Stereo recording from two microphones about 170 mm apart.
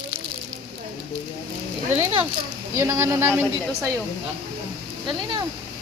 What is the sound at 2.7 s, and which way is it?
A woman's voice, 15° right (ahead or behind).